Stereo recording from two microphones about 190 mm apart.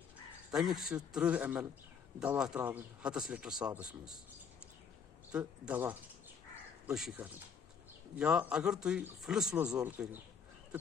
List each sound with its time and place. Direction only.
0.5 s a man's voice: centre (ahead or behind)
5.3 s a man's voice: 10° right (ahead or behind)